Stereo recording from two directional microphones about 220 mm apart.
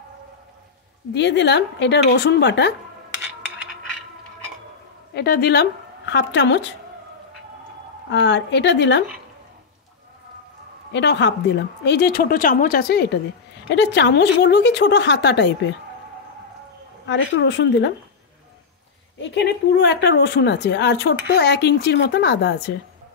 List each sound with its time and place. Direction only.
1.1 s speech: 50° left (ahead or behind)
5.1 s a woman's voice: 45° left (ahead or behind)
8.1 s speech: 55° left (ahead or behind)
10.9 s speech: 50° left (ahead or behind)
17.1 s speech: 50° left (ahead or behind)
19.2 s speech: 50° left (ahead or behind)